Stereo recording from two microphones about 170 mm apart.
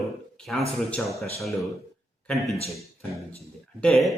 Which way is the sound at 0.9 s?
5° left (ahead or behind).